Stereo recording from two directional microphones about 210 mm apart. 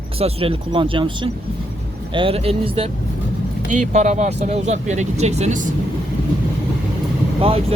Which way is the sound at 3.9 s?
35° right (ahead or behind).